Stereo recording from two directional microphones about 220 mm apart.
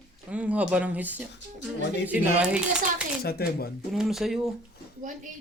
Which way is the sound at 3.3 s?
45° left (ahead or behind).